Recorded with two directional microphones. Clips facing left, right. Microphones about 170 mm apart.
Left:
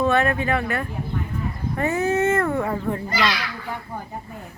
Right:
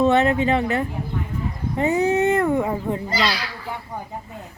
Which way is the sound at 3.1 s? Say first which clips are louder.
Even; 30° right (ahead or behind).